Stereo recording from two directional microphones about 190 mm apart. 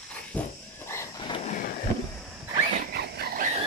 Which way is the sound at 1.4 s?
45° left (ahead or behind).